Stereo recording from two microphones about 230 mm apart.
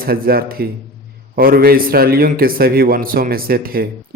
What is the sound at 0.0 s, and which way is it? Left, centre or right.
A man's voice, right.